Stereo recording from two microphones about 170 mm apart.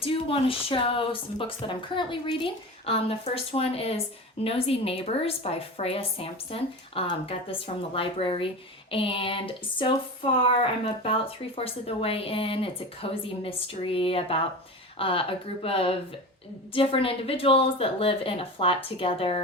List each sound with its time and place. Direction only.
0.0 s speech: 35° left (ahead or behind)